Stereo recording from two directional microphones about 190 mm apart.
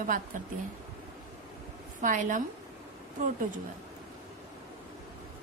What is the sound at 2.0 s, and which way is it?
Speech, 45° right (ahead or behind).